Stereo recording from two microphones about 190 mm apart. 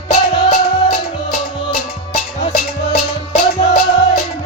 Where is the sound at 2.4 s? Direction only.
45° left (ahead or behind).